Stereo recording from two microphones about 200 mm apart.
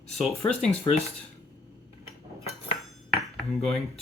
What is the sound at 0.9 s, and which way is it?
Speech, 20° left (ahead or behind).